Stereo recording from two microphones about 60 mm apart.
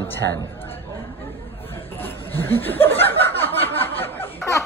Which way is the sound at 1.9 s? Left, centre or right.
Left.